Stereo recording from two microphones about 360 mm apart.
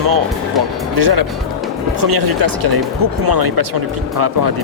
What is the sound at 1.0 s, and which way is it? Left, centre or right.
Speech, right.